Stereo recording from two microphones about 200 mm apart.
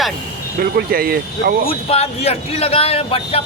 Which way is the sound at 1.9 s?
30° left (ahead or behind).